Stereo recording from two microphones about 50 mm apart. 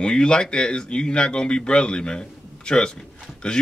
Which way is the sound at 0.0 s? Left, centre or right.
Centre.